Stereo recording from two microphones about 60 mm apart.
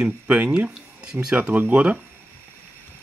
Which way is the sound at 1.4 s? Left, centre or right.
Right.